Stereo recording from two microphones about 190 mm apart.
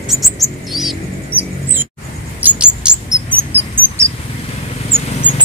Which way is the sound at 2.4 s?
5° right (ahead or behind).